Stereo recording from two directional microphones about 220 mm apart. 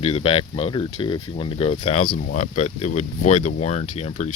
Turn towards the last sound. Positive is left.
turn(degrees=35)  # may be behind; listen again after turning